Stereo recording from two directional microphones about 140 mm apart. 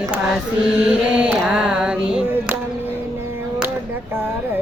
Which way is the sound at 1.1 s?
10° right (ahead or behind).